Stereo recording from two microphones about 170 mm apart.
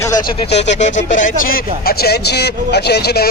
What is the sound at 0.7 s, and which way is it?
Speech, 45° left (ahead or behind).